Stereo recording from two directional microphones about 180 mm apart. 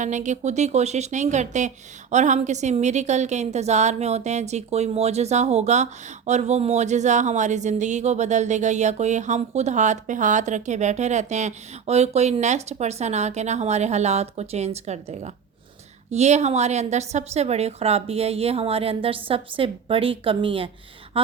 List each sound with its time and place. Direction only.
0.0 s speech: 40° right (ahead or behind)